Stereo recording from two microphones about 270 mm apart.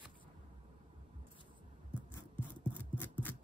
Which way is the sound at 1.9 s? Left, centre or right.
Centre.